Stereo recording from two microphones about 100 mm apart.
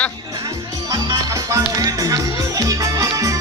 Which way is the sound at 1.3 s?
30° right (ahead or behind).